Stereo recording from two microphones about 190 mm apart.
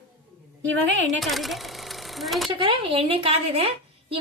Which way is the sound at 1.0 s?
Centre (ahead or behind).